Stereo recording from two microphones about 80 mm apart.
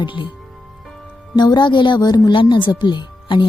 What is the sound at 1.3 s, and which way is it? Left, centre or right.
Speech, left.